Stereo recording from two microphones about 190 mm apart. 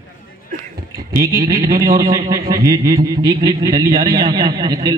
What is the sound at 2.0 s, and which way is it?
Speech, 45° right (ahead or behind).